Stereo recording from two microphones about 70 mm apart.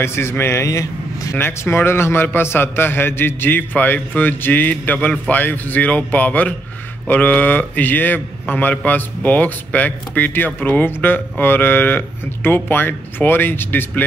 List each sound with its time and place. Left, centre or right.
0.0 s a man's voice: left
0.7 s vehicle: left
1.4 s a man's voice: left